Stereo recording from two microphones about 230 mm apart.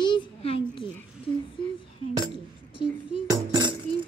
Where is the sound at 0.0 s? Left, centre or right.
Left.